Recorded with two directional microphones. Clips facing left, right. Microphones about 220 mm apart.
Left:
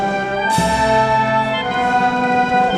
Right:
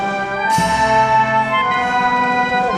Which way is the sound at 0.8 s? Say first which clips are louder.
Left 1 dB; 35° left (ahead or behind).